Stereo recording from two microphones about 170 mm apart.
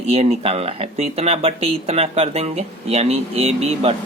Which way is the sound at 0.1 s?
40° right (ahead or behind).